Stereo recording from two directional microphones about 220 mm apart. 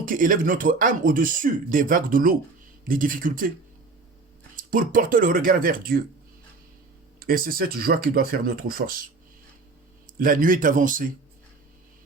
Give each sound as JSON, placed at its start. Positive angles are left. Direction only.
{"t": 0.0, "sound": "speech", "side_deg": -40}
{"t": 4.5, "sound": "speech", "side_deg": -40}
{"t": 7.2, "sound": "speech", "side_deg": -40}
{"t": 10.2, "sound": "speech", "side_deg": -40}